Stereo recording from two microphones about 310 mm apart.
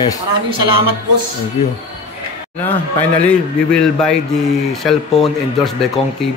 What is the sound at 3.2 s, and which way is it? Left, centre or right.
Speech, centre.